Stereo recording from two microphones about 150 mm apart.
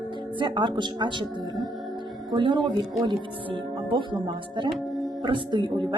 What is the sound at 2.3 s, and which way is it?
A woman's voice, 30° right (ahead or behind).